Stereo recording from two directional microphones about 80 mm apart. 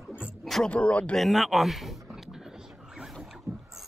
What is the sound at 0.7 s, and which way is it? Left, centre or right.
Speech, centre.